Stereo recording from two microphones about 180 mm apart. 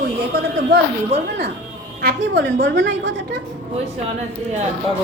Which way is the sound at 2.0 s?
65° right (ahead or behind).